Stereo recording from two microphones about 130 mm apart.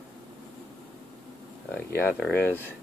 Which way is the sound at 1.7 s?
15° left (ahead or behind).